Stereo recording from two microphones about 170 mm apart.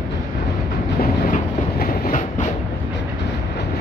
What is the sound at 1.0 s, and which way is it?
Train, 50° left (ahead or behind).